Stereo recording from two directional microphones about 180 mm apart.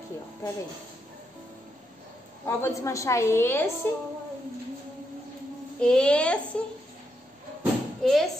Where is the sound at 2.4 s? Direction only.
15° left (ahead or behind).